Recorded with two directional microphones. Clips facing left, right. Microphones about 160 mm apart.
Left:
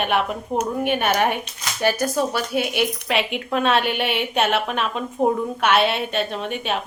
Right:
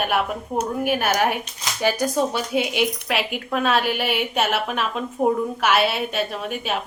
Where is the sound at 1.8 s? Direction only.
15° right (ahead or behind).